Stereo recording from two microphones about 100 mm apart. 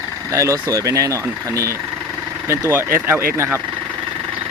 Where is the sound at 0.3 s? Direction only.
35° right (ahead or behind).